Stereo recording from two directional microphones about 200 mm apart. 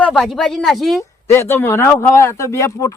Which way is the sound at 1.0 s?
15° left (ahead or behind).